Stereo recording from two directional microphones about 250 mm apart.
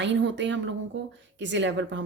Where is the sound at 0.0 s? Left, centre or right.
Right.